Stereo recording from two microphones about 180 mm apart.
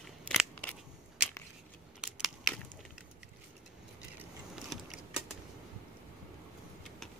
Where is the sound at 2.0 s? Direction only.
5° right (ahead or behind).